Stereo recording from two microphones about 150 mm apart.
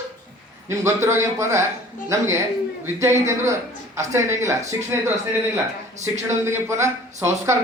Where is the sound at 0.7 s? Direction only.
20° right (ahead or behind).